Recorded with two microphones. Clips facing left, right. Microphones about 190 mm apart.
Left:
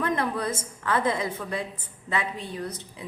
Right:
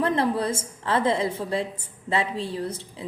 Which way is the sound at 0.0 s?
30° right (ahead or behind).